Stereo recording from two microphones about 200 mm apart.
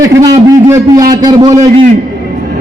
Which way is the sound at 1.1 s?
20° right (ahead or behind).